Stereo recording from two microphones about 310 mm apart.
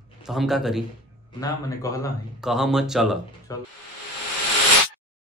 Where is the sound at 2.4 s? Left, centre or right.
Centre.